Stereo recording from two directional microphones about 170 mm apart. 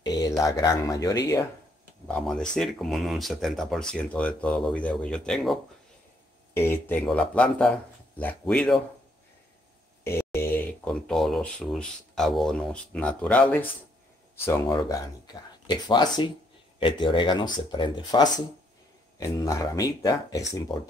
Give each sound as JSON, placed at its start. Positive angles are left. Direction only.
{"t": 0.0, "sound": "a sound", "side_deg": 25}
{"t": 0.4, "sound": "speech", "side_deg": 20}
{"t": 2.0, "sound": "speech", "side_deg": 5}
{"t": 6.5, "sound": "speech", "side_deg": 15}
{"t": 10.0, "sound": "speech", "side_deg": 15}
{"t": 14.7, "sound": "speech", "side_deg": 25}